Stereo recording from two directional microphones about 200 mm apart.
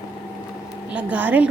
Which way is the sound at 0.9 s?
5° right (ahead or behind).